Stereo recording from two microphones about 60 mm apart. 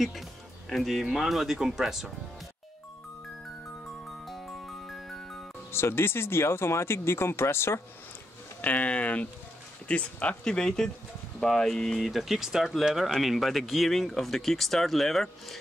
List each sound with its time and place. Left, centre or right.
0.7 s speech: centre
4.3 s music: centre
5.7 s speech: left
8.5 s speech: left; by 15.5 s centre